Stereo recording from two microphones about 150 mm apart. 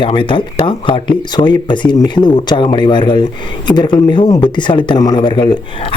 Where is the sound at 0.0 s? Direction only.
35° left (ahead or behind).